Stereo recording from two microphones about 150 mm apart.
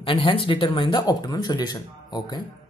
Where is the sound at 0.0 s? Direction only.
35° left (ahead or behind).